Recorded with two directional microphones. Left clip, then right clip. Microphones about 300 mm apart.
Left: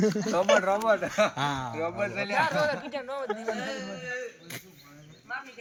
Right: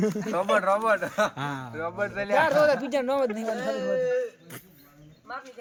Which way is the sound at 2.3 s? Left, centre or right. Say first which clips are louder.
Right 7 dB; right.